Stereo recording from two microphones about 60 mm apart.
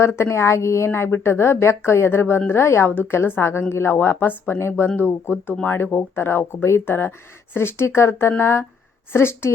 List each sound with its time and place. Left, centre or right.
0.0 s speech: left
3.9 s speech: left